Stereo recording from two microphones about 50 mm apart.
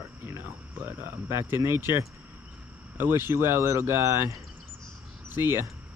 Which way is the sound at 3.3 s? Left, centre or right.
Right.